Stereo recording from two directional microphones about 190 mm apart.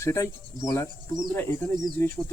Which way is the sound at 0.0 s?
15° left (ahead or behind).